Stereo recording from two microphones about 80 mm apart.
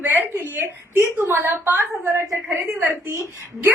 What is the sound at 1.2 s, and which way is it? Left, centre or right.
Speech, right.